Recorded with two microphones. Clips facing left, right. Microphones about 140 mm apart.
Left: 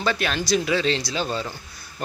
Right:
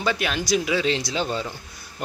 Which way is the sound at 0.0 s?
15° right (ahead or behind).